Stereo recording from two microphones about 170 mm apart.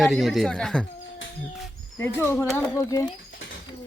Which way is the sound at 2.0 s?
15° left (ahead or behind).